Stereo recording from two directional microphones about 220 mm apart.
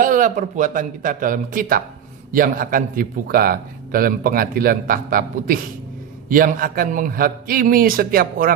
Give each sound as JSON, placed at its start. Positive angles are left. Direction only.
{"t": 0.0, "sound": "a man's voice", "side_deg": -35}